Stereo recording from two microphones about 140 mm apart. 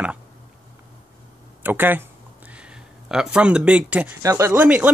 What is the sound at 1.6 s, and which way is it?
Speech, 15° right (ahead or behind).